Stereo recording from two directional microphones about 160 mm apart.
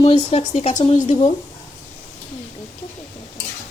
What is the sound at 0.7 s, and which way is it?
Speech, 30° left (ahead or behind).